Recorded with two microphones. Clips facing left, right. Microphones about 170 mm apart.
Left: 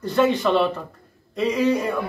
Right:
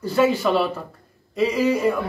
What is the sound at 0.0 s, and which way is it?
A man's voice, 5° right (ahead or behind).